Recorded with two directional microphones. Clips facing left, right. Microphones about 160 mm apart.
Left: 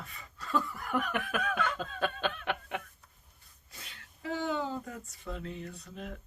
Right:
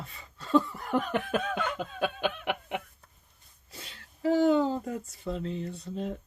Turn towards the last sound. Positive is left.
turn(degrees=-30)  # may be behind; listen again after turning